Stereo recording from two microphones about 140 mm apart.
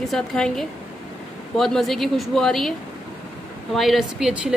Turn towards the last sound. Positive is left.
turn(degrees=-5)  # may be behind; listen again after turning